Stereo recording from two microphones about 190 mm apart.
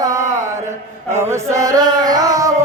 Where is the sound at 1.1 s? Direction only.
15° right (ahead or behind).